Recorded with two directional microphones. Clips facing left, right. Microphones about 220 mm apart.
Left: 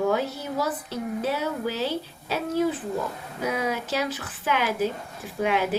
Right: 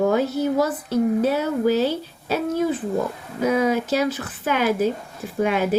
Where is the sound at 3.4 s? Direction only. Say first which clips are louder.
Right 8 dB; 45° right (ahead or behind).